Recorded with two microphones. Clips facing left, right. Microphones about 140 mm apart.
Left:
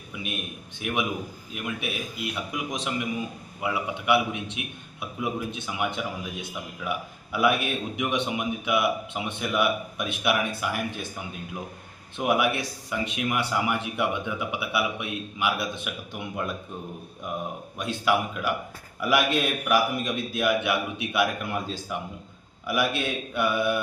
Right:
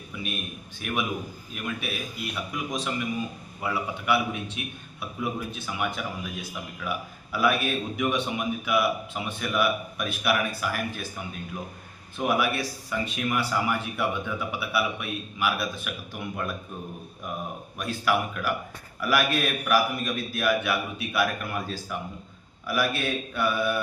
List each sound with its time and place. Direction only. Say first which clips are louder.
0.1 s a man's voice: even; 15° left (ahead or behind)
12.1 s speech: left 1 dB; 20° left (ahead or behind)
17.7 s speech: left 1 dB; 20° left (ahead or behind)